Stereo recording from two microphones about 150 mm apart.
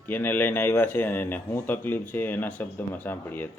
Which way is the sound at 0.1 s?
15° left (ahead or behind).